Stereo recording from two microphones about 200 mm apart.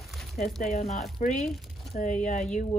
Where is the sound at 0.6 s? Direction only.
35° left (ahead or behind).